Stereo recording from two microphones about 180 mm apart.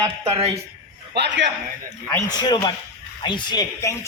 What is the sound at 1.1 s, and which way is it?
Speech, 75° right (ahead or behind).